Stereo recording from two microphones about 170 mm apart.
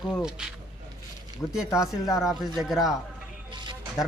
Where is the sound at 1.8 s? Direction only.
20° left (ahead or behind).